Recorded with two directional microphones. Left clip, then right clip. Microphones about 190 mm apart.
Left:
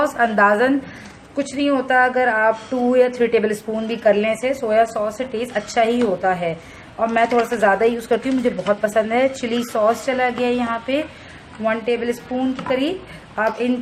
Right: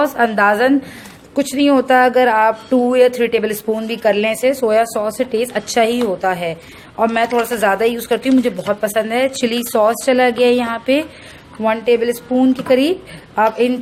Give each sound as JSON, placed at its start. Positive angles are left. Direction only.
{"t": 0.0, "sound": "speech", "side_deg": -45}